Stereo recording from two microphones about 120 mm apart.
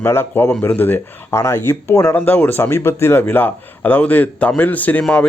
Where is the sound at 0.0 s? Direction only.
20° left (ahead or behind).